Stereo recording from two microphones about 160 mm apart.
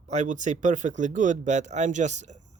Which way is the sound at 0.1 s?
50° right (ahead or behind).